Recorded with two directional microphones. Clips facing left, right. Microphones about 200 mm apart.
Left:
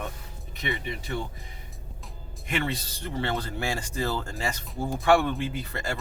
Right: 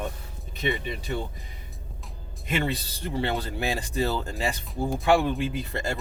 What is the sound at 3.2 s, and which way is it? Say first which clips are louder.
Speech: right 1 dB; 20° right (ahead or behind).